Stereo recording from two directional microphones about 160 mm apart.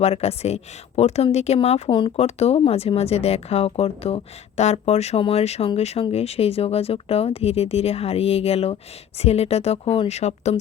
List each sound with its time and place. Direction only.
0.0 s speech: 40° left (ahead or behind)